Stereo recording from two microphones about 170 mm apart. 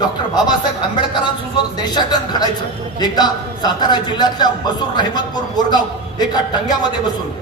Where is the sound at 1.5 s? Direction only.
25° left (ahead or behind).